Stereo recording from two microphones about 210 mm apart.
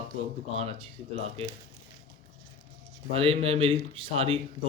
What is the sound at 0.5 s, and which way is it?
Speech, 30° right (ahead or behind).